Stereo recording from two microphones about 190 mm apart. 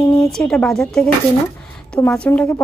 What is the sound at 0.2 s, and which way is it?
Speech, 5° left (ahead or behind).